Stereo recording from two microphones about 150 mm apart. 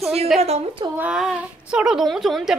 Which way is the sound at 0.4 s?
45° right (ahead or behind).